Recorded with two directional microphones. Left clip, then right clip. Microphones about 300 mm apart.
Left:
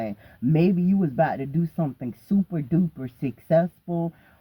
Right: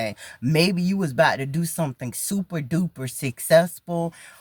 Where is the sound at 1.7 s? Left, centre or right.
Right.